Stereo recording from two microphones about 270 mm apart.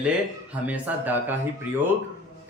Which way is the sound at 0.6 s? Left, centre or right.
Centre.